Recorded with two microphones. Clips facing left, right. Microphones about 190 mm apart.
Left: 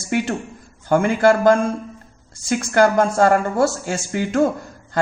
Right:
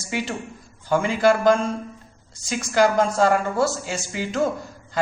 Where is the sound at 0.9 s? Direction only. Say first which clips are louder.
Left 3 dB; 55° left (ahead or behind).